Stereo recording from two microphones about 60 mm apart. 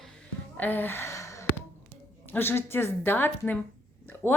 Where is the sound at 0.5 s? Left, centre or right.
Left.